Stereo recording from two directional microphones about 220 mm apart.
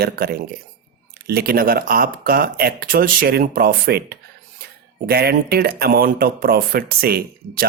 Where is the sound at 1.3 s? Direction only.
45° right (ahead or behind).